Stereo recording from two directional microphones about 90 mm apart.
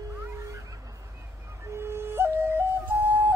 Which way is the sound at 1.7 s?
25° right (ahead or behind).